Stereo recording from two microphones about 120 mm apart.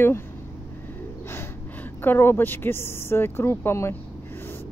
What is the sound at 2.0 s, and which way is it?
Speech, 20° left (ahead or behind).